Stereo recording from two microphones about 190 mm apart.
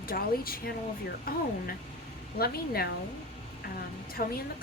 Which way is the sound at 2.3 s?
55° left (ahead or behind).